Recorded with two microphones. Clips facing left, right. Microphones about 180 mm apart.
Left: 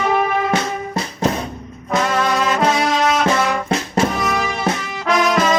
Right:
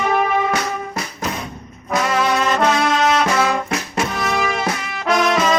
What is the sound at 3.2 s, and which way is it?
Music, 30° left (ahead or behind).